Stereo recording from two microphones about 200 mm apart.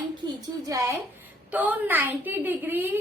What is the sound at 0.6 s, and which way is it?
A child's voice, 15° right (ahead or behind).